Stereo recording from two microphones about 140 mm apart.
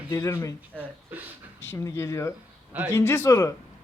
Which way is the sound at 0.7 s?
15° right (ahead or behind).